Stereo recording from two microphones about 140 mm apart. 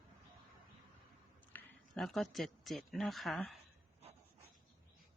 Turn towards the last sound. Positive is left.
turn(degrees=0)  # may be behind; listen again after turning